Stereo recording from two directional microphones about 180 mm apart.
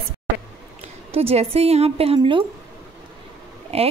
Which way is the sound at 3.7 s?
35° right (ahead or behind).